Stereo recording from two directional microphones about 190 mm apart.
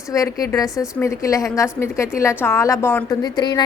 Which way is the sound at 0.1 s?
15° left (ahead or behind).